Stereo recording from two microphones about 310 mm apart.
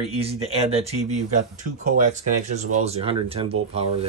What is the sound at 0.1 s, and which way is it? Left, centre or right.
Speech, centre.